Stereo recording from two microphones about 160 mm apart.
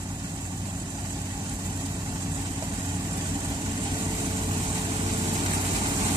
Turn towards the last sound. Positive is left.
turn(degrees=-25)  # may be behind; listen again after turning